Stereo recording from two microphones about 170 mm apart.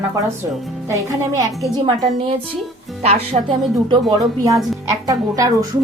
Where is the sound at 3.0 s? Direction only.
40° right (ahead or behind).